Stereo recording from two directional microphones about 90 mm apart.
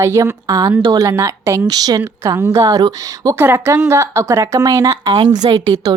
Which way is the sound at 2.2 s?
35° right (ahead or behind).